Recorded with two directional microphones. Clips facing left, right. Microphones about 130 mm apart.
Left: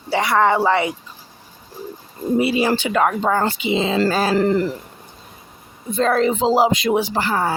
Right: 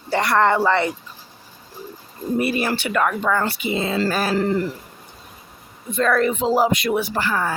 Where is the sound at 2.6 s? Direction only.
20° left (ahead or behind).